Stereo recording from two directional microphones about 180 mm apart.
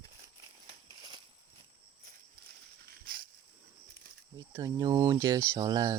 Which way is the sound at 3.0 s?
55° right (ahead or behind).